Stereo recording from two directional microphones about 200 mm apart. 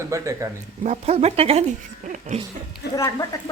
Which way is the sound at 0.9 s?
30° right (ahead or behind).